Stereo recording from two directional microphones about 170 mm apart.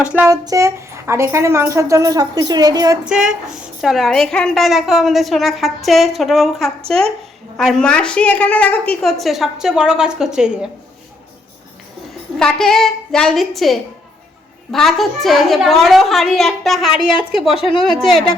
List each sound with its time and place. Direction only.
0.0 s speech: 10° right (ahead or behind)
0.3 s speech: 20° right (ahead or behind)
3.1 s a woman's voice: 5° right (ahead or behind)
12.4 s a woman's voice: centre (ahead or behind)
17.6 s speech: 30° left (ahead or behind)
17.8 s a woman's voice: centre (ahead or behind)